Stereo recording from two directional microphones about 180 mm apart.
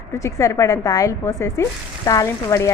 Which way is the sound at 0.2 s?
15° left (ahead or behind).